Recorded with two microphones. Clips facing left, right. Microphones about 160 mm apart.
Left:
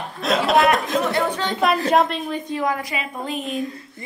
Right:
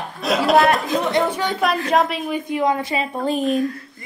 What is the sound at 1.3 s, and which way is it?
A woman's voice, 10° right (ahead or behind).